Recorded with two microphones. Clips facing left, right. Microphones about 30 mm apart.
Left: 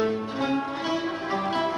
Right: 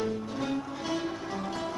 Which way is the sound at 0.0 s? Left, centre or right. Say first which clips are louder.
Left 6 dB; left.